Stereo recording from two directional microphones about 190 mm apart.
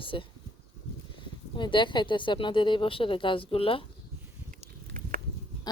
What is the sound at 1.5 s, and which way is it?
Speech, 25° left (ahead or behind).